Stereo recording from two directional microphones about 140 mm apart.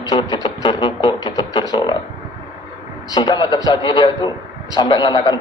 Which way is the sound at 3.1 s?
30° left (ahead or behind).